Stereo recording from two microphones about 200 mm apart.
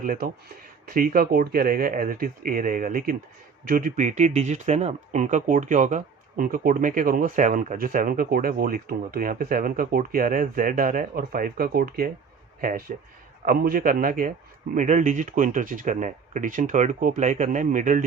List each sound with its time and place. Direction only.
0.0 s speech: 45° right (ahead or behind)
13.4 s speech: 45° right (ahead or behind)